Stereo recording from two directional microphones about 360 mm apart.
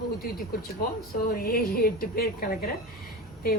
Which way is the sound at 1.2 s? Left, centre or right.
Left.